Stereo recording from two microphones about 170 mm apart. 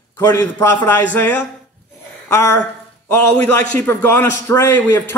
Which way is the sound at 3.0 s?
10° left (ahead or behind).